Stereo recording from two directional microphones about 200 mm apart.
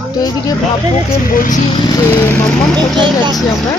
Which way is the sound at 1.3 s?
45° left (ahead or behind).